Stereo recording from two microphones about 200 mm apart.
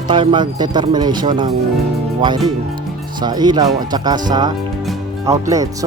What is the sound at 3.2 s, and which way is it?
Speech, 20° right (ahead or behind).